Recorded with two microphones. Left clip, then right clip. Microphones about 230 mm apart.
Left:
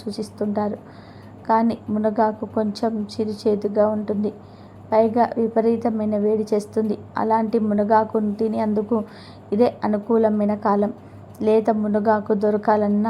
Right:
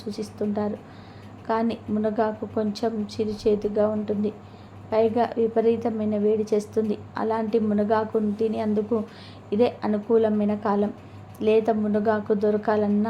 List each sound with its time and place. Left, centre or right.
0.0 s a woman's voice: centre
1.7 s a woman's voice: centre